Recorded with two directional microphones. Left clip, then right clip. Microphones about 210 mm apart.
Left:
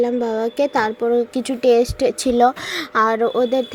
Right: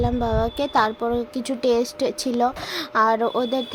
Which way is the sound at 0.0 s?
5° left (ahead or behind).